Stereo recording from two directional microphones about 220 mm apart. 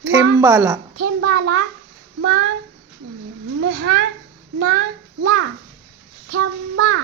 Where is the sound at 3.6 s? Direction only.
45° right (ahead or behind).